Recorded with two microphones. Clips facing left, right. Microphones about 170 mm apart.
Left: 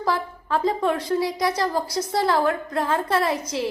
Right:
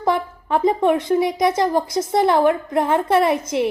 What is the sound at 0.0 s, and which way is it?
A woman's voice, 20° right (ahead or behind).